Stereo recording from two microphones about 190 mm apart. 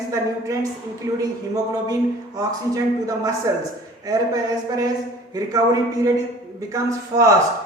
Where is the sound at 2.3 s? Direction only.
20° right (ahead or behind).